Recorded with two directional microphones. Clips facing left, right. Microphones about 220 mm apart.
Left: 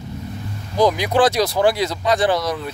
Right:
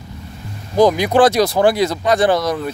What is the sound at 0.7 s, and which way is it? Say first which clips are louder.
Speech: right 4 dB; 50° right (ahead or behind).